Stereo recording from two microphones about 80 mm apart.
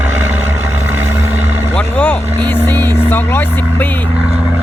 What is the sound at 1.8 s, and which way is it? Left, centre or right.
Vehicle, centre.